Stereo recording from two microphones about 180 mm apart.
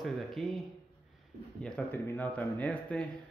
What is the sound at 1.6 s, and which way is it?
Speech, 10° left (ahead or behind).